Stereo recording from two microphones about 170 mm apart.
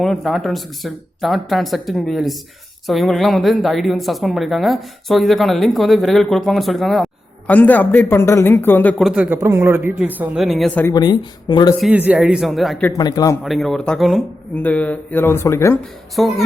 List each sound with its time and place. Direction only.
0.0 s speech: centre (ahead or behind)
9.0 s a man's voice: 5° right (ahead or behind)
10.8 s speech: 25° left (ahead or behind)
11.8 s speech: 10° right (ahead or behind)
13.0 s speech: 20° left (ahead or behind)
13.4 s speech: centre (ahead or behind)
16.2 s speech: centre (ahead or behind)